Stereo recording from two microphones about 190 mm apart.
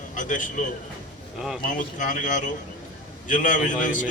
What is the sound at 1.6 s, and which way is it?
A man's voice, 40° left (ahead or behind).